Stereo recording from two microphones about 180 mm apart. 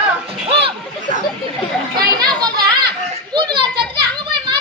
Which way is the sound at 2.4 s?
25° right (ahead or behind).